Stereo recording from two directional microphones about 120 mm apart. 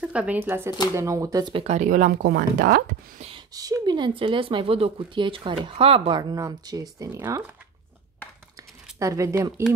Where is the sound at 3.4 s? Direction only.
30° right (ahead or behind); by 6.2 s 50° right (ahead or behind).